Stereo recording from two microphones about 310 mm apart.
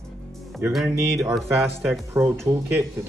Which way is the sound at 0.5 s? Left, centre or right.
Centre.